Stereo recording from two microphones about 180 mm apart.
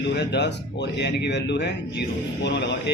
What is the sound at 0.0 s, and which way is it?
A man's voice, 70° left (ahead or behind).